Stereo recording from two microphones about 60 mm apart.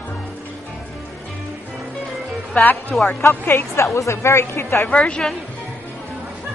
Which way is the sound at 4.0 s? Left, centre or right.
Left.